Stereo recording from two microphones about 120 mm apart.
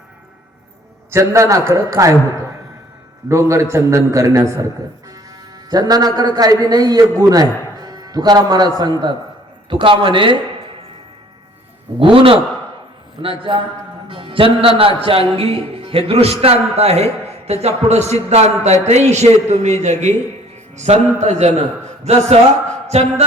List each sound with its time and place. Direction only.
1.1 s a man's voice: 25° right (ahead or behind)
3.2 s a man's voice: 25° right (ahead or behind)
5.7 s a man's voice: 35° right (ahead or behind)
11.9 s a man's voice: 50° right (ahead or behind); by 23.2 s 65° right (ahead or behind)